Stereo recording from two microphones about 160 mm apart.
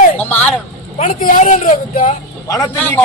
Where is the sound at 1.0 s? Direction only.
60° left (ahead or behind).